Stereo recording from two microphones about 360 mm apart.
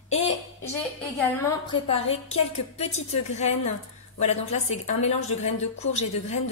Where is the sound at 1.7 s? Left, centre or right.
Centre.